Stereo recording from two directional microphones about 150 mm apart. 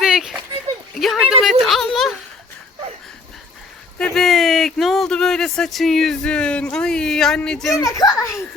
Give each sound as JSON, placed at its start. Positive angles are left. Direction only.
{"t": 0.0, "sound": "a sound", "side_deg": -5}
{"t": 3.9, "sound": "speech", "side_deg": 5}
{"t": 7.8, "sound": "a child's voice", "side_deg": 25}